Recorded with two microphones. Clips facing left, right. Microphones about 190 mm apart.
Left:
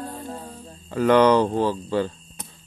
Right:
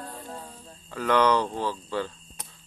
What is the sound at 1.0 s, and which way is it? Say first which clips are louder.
Speech: left 6 dB; 20° left (ahead or behind).